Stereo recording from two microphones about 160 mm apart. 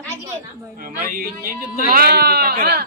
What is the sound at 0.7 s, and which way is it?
Speech, 60° right (ahead or behind).